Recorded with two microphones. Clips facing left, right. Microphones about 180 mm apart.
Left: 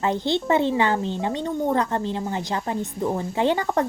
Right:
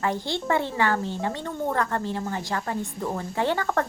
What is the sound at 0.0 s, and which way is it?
Speech, 20° left (ahead or behind).